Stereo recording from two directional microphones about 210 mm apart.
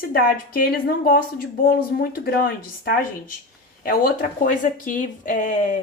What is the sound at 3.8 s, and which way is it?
Speech, 45° left (ahead or behind).